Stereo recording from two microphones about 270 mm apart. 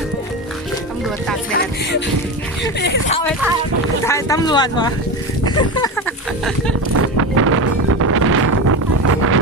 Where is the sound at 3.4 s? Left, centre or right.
Centre.